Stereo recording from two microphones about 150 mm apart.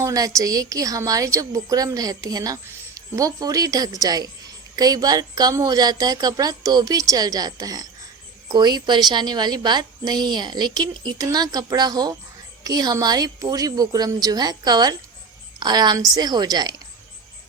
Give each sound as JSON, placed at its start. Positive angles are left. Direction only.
{"t": 0.0, "sound": "a woman's voice", "side_deg": -20}